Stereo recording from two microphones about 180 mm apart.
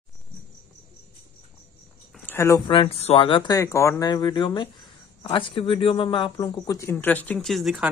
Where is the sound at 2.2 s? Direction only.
15° left (ahead or behind).